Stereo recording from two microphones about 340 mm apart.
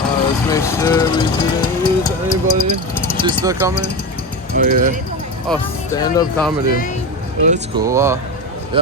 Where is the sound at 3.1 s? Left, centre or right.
Centre.